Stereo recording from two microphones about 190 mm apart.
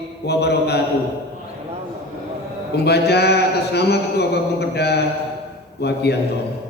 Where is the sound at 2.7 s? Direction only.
60° left (ahead or behind).